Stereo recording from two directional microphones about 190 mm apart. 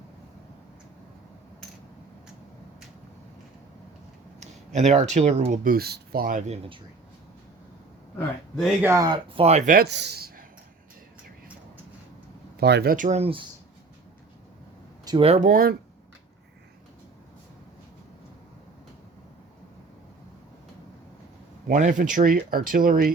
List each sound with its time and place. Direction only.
4.4 s speech: 35° right (ahead or behind)
8.8 s speech: 15° right (ahead or behind)
9.4 s speech: 35° right (ahead or behind)
9.7 s speech: 60° right (ahead or behind)
12.5 s speech: 60° right (ahead or behind); by 13.4 s 30° right (ahead or behind)
15.0 s speech: 25° right (ahead or behind); by 15.7 s 45° right (ahead or behind)
21.7 s speech: 40° right (ahead or behind)